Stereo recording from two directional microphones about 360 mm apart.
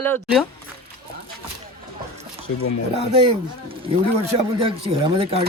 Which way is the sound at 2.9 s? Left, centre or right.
Centre.